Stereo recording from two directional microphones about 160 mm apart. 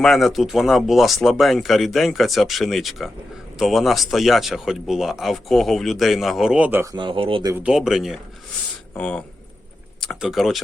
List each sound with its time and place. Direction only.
0.0 s speech: centre (ahead or behind)
6.9 s speech: 30° right (ahead or behind)
7.6 s speech: 5° right (ahead or behind)